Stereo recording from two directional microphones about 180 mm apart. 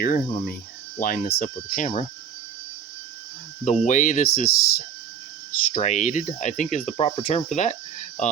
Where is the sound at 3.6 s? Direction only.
40° left (ahead or behind).